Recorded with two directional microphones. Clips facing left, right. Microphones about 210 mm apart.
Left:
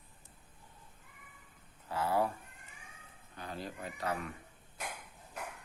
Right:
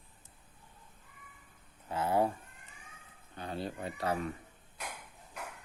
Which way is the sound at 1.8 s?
20° right (ahead or behind).